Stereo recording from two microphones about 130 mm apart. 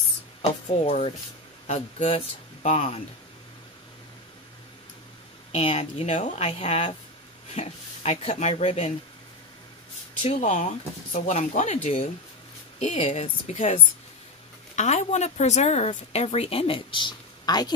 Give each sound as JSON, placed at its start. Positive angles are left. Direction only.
{"t": 0.8, "sound": "a woman's voice", "side_deg": 55}
{"t": 5.5, "sound": "a woman's voice", "side_deg": 50}
{"t": 6.1, "sound": "a woman's voice", "side_deg": 60}
{"t": 10.2, "sound": "a woman's voice", "side_deg": 65}
{"t": 14.8, "sound": "a woman's voice", "side_deg": 65}